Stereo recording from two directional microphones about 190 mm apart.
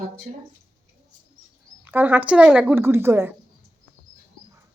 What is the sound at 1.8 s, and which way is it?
Speech, 10° right (ahead or behind).